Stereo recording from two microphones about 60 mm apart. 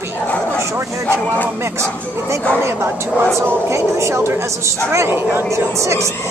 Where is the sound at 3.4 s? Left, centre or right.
Right.